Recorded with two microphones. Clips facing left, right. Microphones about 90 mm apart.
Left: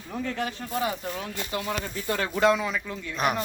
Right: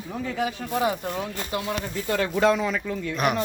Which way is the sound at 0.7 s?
20° right (ahead or behind).